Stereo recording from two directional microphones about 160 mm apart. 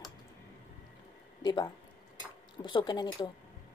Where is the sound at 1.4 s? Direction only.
25° left (ahead or behind).